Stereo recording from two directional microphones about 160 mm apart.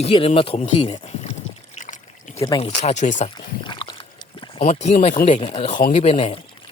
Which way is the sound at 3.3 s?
30° left (ahead or behind).